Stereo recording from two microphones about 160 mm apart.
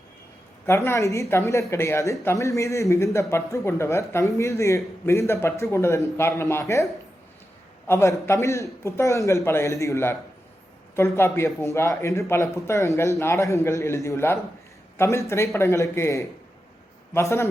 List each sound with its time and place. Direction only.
0.6 s speech: 15° left (ahead or behind)
7.9 s speech: 15° left (ahead or behind)